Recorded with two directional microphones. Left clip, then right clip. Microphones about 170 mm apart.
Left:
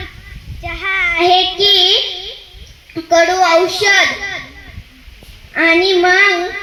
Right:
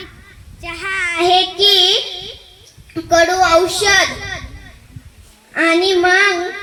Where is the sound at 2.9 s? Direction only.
25° left (ahead or behind).